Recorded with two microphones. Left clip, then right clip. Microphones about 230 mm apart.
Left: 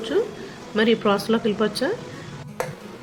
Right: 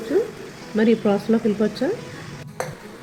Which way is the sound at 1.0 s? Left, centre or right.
Centre.